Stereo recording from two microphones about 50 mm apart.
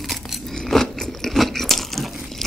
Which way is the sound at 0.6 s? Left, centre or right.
Centre.